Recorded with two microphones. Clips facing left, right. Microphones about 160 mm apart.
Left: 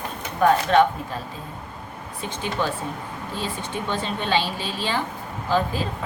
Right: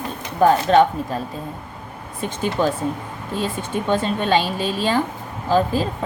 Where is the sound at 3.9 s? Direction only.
45° right (ahead or behind).